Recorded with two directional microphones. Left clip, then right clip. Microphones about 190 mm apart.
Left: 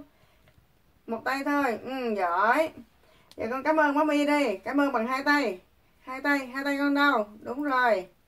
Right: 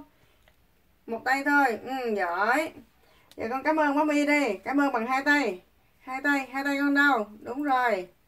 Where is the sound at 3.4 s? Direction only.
35° right (ahead or behind).